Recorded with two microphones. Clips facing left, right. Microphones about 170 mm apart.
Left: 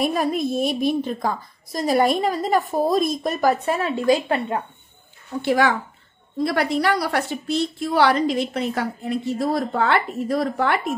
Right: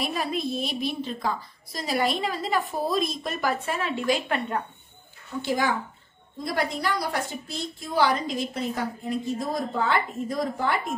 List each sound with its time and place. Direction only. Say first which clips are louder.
0.0 s a woman's voice: left 7 dB; 50° left (ahead or behind)
5.4 s a woman's voice: left 6 dB; 70° left (ahead or behind)